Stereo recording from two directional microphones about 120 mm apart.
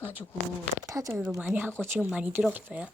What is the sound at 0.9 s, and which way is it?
Speech, 30° right (ahead or behind).